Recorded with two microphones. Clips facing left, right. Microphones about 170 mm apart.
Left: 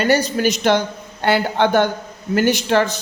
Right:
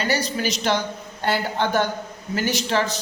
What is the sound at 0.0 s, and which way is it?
Speech, 50° left (ahead or behind).